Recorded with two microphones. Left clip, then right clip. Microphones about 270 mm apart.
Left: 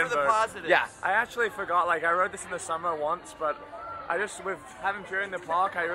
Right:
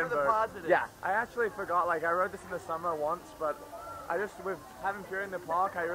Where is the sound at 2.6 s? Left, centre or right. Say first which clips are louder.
Left 3 dB; right.